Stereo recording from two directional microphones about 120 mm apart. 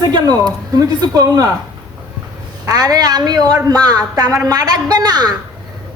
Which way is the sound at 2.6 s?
30° right (ahead or behind).